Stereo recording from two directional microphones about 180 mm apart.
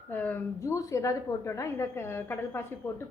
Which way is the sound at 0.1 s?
10° left (ahead or behind).